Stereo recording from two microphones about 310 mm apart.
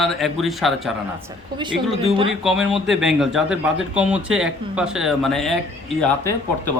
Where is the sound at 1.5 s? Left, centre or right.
Centre.